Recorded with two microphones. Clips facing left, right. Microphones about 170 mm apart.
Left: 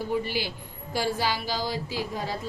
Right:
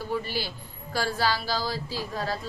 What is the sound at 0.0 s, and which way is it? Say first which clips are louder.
A man's voice: left 2 dB; 15° left (ahead or behind).